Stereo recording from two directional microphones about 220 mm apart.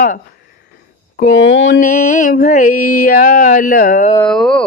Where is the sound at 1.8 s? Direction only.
35° left (ahead or behind).